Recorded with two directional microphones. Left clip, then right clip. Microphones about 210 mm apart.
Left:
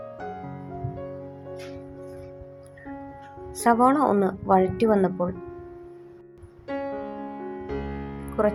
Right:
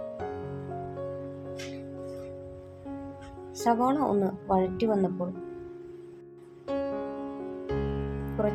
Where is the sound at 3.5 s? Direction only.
20° left (ahead or behind).